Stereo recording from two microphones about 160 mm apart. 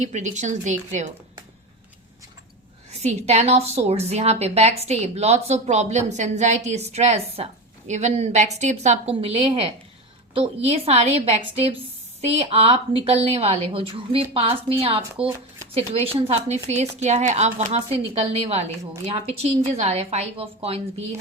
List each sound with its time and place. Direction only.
0.0 s a woman's voice: 50° right (ahead or behind)
3.0 s a woman's voice: 45° right (ahead or behind)